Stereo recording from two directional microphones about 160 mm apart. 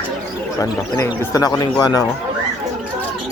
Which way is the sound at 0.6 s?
20° left (ahead or behind).